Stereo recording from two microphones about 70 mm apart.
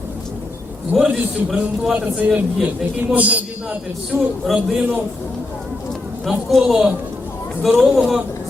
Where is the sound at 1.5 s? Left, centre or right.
Centre.